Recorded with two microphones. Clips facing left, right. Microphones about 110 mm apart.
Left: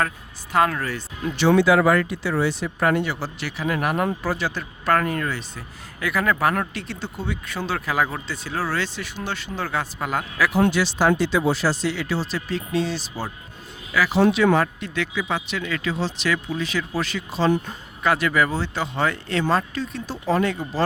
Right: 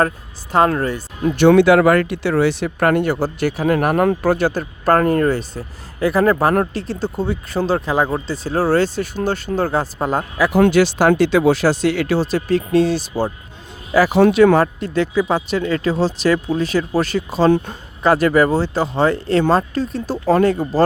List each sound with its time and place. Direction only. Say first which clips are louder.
0.5 s speech: right 5 dB; 30° right (ahead or behind)
1.2 s speech: right 7 dB; 60° right (ahead or behind); by 10.2 s 35° right (ahead or behind)
10.6 s speech: right 7 dB; 60° right (ahead or behind)
11.1 s speech: right 7 dB; 65° right (ahead or behind); by 13.0 s 45° right (ahead or behind)
13.9 s speech: right 8 dB; 30° right (ahead or behind)
14.3 s speech: right 7 dB; 50° right (ahead or behind)
14.6 s speech: right 7 dB; 35° right (ahead or behind)